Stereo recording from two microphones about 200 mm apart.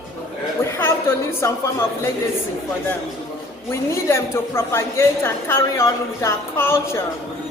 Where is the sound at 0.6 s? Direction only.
10° left (ahead or behind).